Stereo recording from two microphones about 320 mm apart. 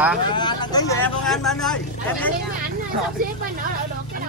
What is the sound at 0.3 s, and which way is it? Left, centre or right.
Speech, centre.